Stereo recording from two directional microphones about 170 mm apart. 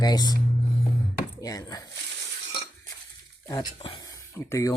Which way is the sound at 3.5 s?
25° left (ahead or behind).